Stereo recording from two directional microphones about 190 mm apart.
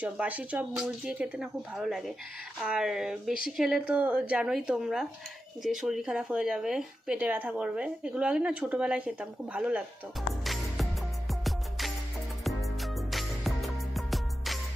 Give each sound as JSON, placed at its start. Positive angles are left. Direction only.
{"t": 0.0, "sound": "speech", "side_deg": -5}
{"t": 10.4, "sound": "music", "side_deg": 0}